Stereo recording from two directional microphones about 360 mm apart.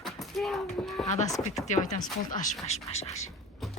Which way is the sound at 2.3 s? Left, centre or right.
Left.